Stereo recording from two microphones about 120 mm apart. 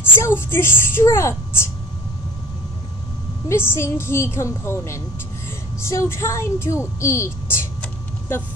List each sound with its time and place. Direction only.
0.0 s speech: 20° left (ahead or behind)
3.4 s speech: 20° left (ahead or behind)